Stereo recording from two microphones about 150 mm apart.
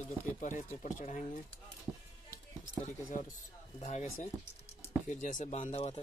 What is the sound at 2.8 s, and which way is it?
Speech, 60° left (ahead or behind).